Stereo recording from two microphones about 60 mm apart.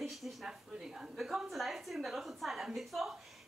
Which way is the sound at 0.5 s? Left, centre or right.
Centre.